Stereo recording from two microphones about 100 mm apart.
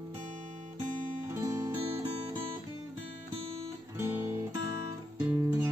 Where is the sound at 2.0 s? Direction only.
80° right.